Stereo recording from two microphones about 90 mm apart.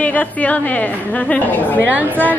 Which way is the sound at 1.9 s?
20° right (ahead or behind).